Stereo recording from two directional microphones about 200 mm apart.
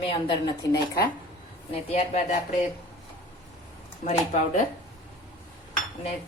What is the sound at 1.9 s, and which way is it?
Speech, 35° left (ahead or behind).